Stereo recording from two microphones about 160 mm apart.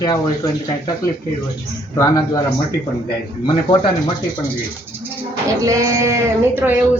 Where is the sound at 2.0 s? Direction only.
25° left (ahead or behind).